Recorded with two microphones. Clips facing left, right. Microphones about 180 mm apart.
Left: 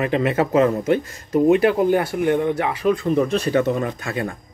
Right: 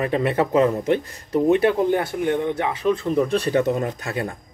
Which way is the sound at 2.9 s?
35° right (ahead or behind).